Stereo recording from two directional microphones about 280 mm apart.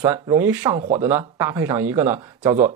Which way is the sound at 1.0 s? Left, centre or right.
Centre.